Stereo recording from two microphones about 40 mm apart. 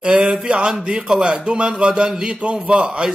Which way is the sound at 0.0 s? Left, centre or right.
Right.